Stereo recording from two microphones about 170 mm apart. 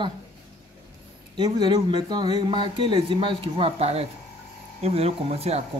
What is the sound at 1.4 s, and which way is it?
Speech, 25° right (ahead or behind).